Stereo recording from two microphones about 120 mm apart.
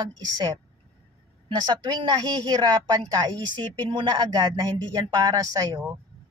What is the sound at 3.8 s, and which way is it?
A woman's voice, 40° right (ahead or behind).